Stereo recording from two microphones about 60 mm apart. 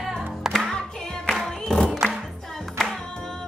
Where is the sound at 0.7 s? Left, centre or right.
Centre.